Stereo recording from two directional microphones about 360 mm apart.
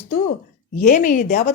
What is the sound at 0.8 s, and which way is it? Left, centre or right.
Speech, left.